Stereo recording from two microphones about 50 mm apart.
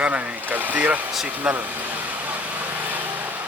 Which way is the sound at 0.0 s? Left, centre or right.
Right.